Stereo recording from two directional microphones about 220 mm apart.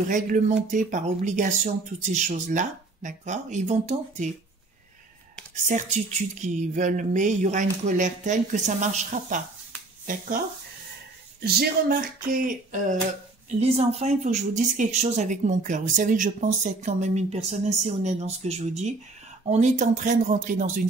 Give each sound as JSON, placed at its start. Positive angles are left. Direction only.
{"t": 0.7, "sound": "a woman's voice", "side_deg": -35}
{"t": 5.7, "sound": "a woman's voice", "side_deg": -35}
{"t": 11.4, "sound": "a woman's voice", "side_deg": -40}